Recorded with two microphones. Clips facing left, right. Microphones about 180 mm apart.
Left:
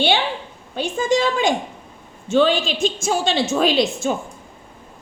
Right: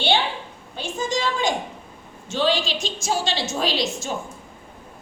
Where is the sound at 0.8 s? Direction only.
55° left (ahead or behind).